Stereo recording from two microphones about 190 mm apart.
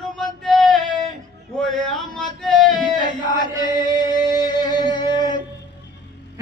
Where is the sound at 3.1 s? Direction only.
20° left (ahead or behind).